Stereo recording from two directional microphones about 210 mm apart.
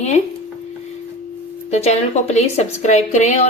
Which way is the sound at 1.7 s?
30° left (ahead or behind).